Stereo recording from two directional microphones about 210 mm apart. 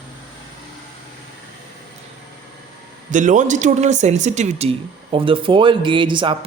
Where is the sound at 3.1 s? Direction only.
35° right (ahead or behind).